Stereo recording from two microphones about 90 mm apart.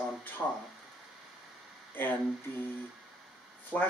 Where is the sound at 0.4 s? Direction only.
10° left (ahead or behind).